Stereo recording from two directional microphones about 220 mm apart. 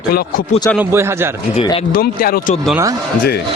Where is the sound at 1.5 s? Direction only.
25° left (ahead or behind).